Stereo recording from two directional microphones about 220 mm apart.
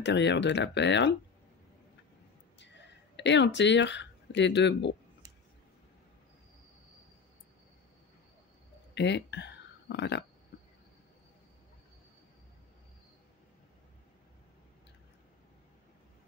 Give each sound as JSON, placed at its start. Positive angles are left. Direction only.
{"t": 0.0, "sound": "speech", "side_deg": 55}
{"t": 2.6, "sound": "speech", "side_deg": 55}
{"t": 8.9, "sound": "speech", "side_deg": 50}